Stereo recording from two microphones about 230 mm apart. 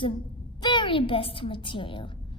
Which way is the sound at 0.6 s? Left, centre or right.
Centre.